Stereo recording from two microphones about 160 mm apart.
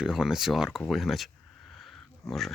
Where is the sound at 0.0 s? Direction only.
5° right (ahead or behind).